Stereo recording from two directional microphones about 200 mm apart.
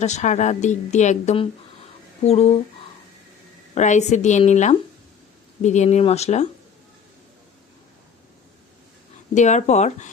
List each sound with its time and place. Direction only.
0.0 s a woman's voice: 35° left (ahead or behind)
3.8 s a woman's voice: 35° left (ahead or behind)
9.3 s a woman's voice: 35° left (ahead or behind)